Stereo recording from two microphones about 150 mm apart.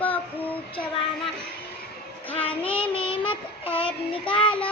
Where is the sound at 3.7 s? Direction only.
40° left (ahead or behind).